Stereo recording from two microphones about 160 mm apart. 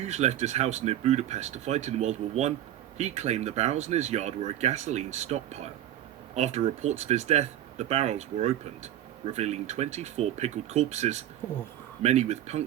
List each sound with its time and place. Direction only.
0.0 s speech: 45° right (ahead or behind)